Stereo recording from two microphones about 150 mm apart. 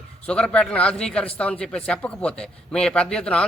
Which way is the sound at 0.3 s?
5° left (ahead or behind).